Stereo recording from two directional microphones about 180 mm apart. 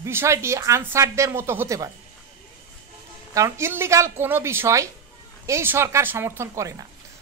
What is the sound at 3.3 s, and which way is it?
A woman's voice, 15° right (ahead or behind).